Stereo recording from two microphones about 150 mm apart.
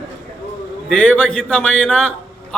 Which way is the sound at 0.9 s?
10° left (ahead or behind).